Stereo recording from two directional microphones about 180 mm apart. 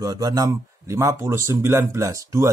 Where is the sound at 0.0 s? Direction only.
20° right (ahead or behind).